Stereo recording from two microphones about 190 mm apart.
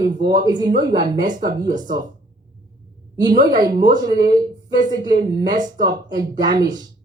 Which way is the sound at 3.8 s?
20° right (ahead or behind).